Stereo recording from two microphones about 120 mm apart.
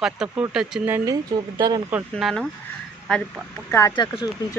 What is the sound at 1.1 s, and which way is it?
Speech, 30° right (ahead or behind).